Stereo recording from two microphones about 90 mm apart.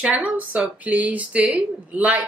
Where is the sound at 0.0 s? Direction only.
15° right (ahead or behind).